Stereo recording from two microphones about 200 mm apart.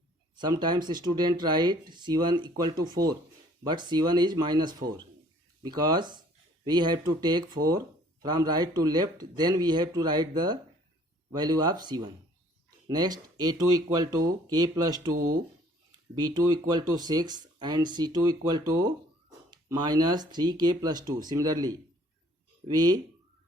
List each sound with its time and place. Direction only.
0.3 s speech: 20° right (ahead or behind)
16.1 s speech: 20° right (ahead or behind)